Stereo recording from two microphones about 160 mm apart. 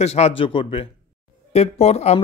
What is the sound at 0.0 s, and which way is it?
Speech, 40° left (ahead or behind).